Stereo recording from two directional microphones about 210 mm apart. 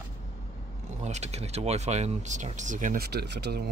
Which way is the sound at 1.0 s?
35° right (ahead or behind).